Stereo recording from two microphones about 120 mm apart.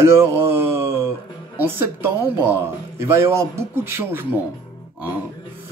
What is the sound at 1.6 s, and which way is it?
Speech, 20° right (ahead or behind).